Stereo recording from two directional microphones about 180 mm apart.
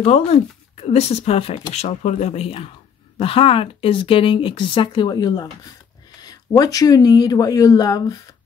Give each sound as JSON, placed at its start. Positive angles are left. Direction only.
{"t": 0.0, "sound": "speech", "side_deg": 35}